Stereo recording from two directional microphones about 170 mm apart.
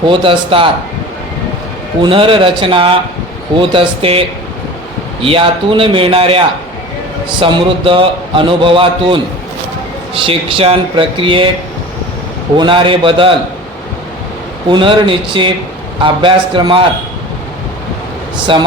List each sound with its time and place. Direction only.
0.0 s speech: 30° right (ahead or behind)
2.0 s a man's voice: 30° right (ahead or behind)
12.5 s a man's voice: 30° right (ahead or behind)
14.7 s a man's voice: 30° right (ahead or behind)
18.5 s a man's voice: 30° right (ahead or behind)